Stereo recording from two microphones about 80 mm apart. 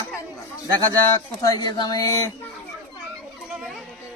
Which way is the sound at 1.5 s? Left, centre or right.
Left.